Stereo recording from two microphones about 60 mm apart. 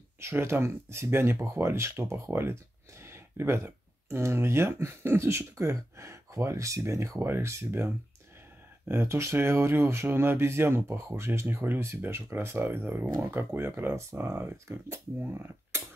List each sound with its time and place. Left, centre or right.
0.2 s speech: right
7.2 s speech: right